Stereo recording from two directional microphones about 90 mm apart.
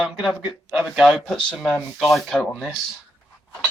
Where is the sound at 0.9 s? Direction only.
5° right (ahead or behind).